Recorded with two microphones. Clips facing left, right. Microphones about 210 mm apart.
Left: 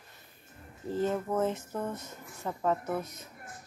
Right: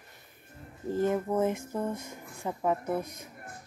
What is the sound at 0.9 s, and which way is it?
A woman's voice, 15° right (ahead or behind).